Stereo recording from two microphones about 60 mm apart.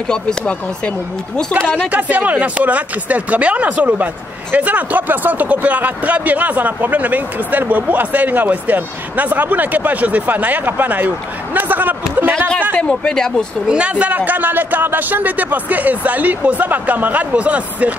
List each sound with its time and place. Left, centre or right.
0.1 s speech: centre
1.9 s speech: right
12.7 s speech: centre
13.7 s speech: right